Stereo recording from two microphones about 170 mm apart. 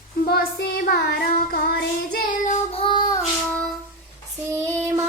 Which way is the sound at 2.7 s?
30° left (ahead or behind).